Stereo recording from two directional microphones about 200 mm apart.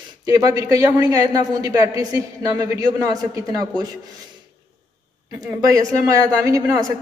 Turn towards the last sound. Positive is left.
turn(degrees=-15)  # may be behind; listen again after turning